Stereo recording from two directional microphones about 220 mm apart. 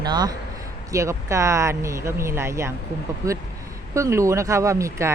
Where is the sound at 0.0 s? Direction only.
20° right (ahead or behind).